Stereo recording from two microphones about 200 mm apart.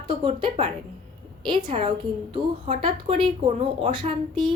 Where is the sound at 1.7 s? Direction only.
30° right (ahead or behind).